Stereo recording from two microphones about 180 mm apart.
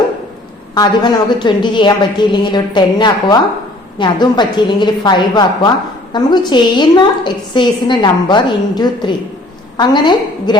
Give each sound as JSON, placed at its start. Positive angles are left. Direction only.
{"t": 0.7, "sound": "a woman's voice", "side_deg": 25}